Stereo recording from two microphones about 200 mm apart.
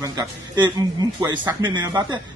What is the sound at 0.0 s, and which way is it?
Speech, 20° right (ahead or behind).